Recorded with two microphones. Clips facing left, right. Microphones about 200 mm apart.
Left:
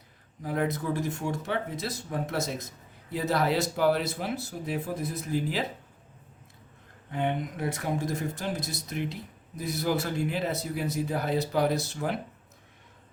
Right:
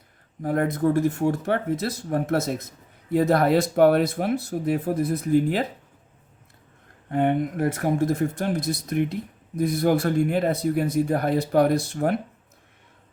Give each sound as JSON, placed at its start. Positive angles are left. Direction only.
{"t": 0.4, "sound": "speech", "side_deg": -55}
{"t": 7.1, "sound": "speech", "side_deg": -55}